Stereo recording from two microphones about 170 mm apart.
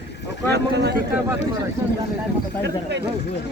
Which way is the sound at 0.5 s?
80° right.